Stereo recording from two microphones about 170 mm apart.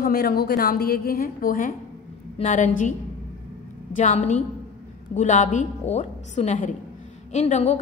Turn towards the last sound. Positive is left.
turn(degrees=40)  # may be behind; listen again after turning